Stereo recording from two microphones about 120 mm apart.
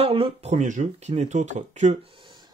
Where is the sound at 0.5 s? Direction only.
90° right.